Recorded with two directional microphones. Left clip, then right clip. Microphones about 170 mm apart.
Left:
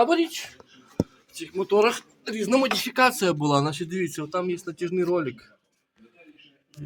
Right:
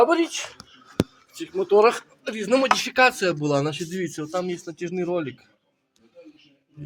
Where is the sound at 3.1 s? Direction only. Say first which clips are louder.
Even; 15° left (ahead or behind).